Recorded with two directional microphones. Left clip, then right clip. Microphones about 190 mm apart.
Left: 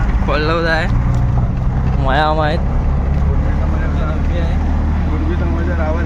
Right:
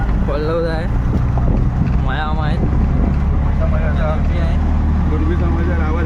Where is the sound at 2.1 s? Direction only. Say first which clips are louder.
Left 10 dB; 30° left (ahead or behind).